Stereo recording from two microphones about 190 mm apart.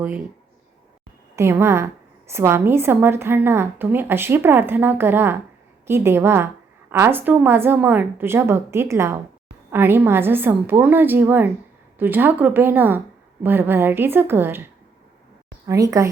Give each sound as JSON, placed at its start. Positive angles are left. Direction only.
{"t": 1.4, "sound": "a woman's voice", "side_deg": -15}
{"t": 15.6, "sound": "a woman's voice", "side_deg": -15}